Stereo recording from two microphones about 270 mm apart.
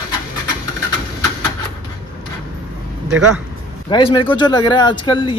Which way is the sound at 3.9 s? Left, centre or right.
Centre.